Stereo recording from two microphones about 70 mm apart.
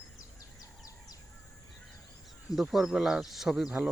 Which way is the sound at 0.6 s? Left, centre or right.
Left.